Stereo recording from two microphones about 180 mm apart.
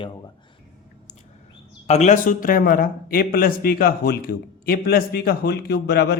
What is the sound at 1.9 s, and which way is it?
A man's voice, 40° left (ahead or behind).